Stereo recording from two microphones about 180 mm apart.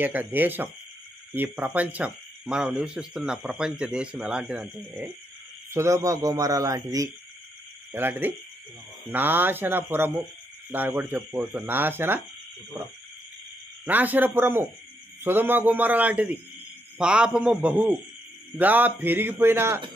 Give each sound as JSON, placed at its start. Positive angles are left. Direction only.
{"t": 0.0, "sound": "a man's voice", "side_deg": -10}